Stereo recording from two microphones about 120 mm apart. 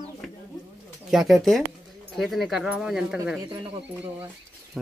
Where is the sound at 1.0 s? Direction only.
5° right (ahead or behind).